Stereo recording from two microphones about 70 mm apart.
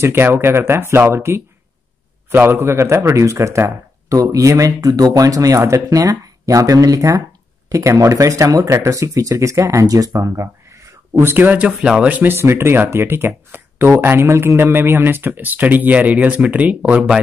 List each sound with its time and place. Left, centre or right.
0.0 s speech: right
11.1 s speech: right
12.4 s speech: right; by 17.2 s centre